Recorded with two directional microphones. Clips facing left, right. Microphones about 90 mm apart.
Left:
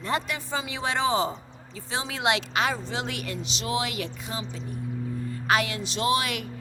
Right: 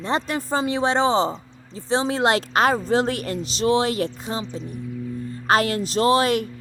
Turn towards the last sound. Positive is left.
turn(degrees=-35)  # may be behind; listen again after turning